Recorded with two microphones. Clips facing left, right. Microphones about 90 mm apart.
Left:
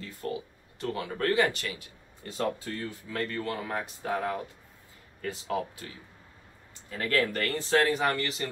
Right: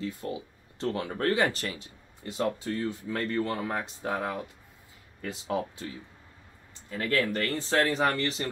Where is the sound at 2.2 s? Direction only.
20° right (ahead or behind).